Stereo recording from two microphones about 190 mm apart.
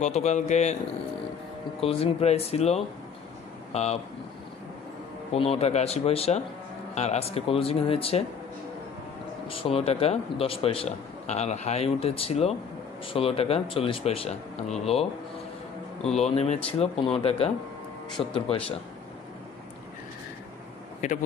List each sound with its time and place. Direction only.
0.0 s a man's voice: 35° left (ahead or behind)
1.8 s a man's voice: 30° left (ahead or behind)
5.3 s a man's voice: 30° left (ahead or behind)
9.5 s a man's voice: 30° left (ahead or behind)
16.2 s a man's voice: 35° left (ahead or behind)
21.0 s a man's voice: 40° left (ahead or behind)